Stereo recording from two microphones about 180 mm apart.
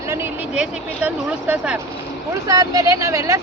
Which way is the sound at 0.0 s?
15° right (ahead or behind).